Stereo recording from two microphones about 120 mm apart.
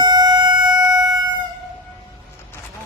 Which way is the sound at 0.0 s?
35° right (ahead or behind).